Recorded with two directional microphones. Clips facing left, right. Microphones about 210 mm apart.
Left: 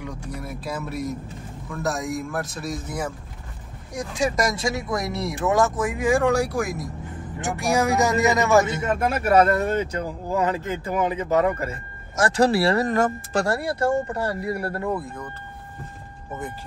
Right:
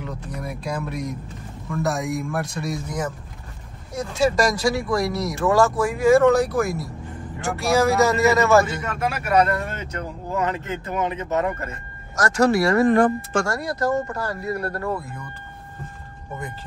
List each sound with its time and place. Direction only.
0.2 s a man's voice: 5° left (ahead or behind)
3.9 s speech: 15° left (ahead or behind)
9.2 s speech: 25° left (ahead or behind)
10.4 s speech: 10° left (ahead or behind)
12.2 s speech: 30° left (ahead or behind)